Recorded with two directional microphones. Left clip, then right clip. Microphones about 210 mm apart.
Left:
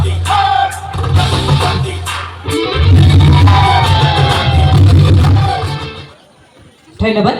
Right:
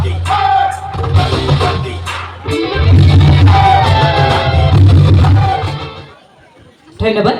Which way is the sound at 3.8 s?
45° left (ahead or behind).